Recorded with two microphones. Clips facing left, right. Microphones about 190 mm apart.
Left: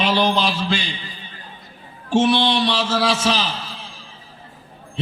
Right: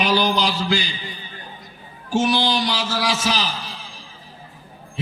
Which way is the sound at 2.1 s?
25° left (ahead or behind).